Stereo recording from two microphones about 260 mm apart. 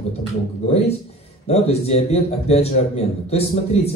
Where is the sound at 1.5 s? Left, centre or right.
Left.